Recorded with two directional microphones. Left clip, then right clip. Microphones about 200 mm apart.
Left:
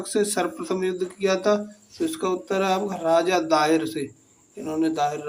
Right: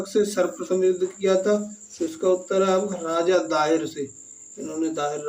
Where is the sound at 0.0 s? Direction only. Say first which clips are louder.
Right 2 dB; 30° left (ahead or behind).